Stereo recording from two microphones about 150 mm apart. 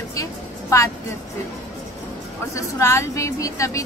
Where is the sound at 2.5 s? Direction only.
20° left (ahead or behind).